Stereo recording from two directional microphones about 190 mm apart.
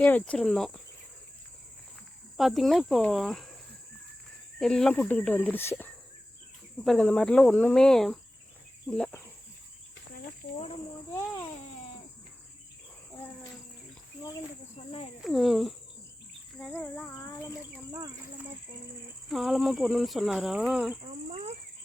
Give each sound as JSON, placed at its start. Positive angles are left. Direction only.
{"t": 0.0, "sound": "speech", "side_deg": 5}
{"t": 2.4, "sound": "speech", "side_deg": 0}
{"t": 4.6, "sound": "speech", "side_deg": 0}
{"t": 14.8, "sound": "cricket", "side_deg": 35}
{"t": 15.2, "sound": "speech", "side_deg": 0}
{"t": 19.3, "sound": "speech", "side_deg": 0}
{"t": 21.0, "sound": "speech", "side_deg": -35}